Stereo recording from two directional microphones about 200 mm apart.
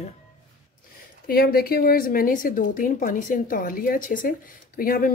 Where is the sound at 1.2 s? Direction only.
50° left (ahead or behind).